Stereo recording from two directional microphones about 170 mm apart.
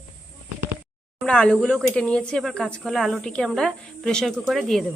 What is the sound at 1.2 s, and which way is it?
Speech, 5° left (ahead or behind).